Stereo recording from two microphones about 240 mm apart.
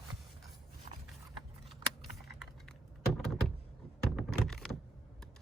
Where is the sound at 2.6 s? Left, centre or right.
Centre.